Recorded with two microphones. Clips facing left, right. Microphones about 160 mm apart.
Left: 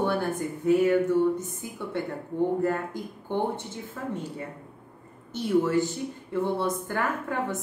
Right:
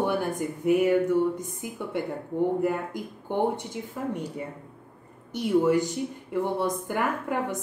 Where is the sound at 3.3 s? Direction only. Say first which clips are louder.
Right 2 dB; 15° right (ahead or behind).